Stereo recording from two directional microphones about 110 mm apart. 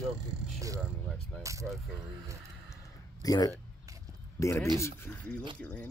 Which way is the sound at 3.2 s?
35° left (ahead or behind).